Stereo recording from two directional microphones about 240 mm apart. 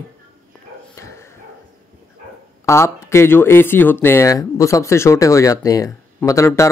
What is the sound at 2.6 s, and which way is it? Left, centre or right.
Speech, centre.